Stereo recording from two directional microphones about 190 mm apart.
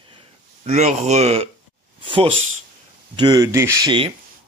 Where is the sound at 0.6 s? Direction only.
35° right (ahead or behind).